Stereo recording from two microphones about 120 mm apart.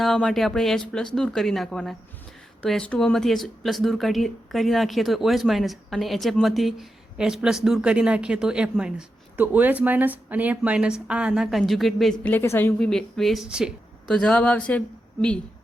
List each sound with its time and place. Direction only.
0.0 s speech: 5° left (ahead or behind)
12.2 s speech: 20° left (ahead or behind)
12.8 s speech: 5° left (ahead or behind)
14.1 s speech: 5° left (ahead or behind)